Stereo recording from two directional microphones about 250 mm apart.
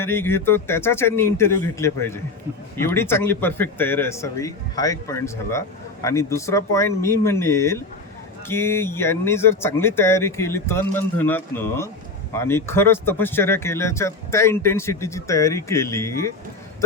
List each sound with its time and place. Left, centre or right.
0.0 s a man's voice: centre